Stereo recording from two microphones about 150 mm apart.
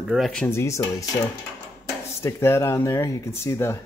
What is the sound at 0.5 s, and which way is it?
Speech, 20° left (ahead or behind).